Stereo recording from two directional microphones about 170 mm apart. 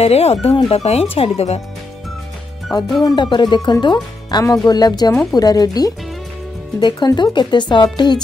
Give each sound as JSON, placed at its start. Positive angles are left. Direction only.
{"t": 0.0, "sound": "speech", "side_deg": 35}
{"t": 3.0, "sound": "speech", "side_deg": 25}